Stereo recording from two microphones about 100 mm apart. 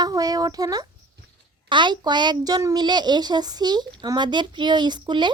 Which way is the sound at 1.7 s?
50° right (ahead or behind).